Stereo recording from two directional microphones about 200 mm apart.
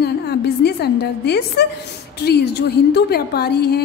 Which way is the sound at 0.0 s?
55° left (ahead or behind).